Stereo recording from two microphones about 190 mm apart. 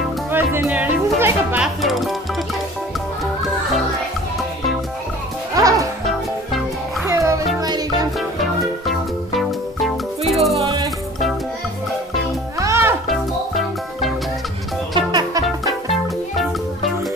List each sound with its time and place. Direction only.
0.3 s speech: 10° right (ahead or behind)
5.5 s music: 20° right (ahead or behind)
7.1 s music: 15° right (ahead or behind)
8.8 s music: centre (ahead or behind)
12.5 s music: 15° right (ahead or behind)
13.1 s music: centre (ahead or behind)
15.0 s music: 20° right (ahead or behind)